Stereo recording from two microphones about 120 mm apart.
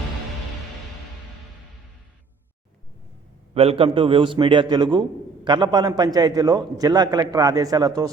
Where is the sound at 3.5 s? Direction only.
55° right (ahead or behind).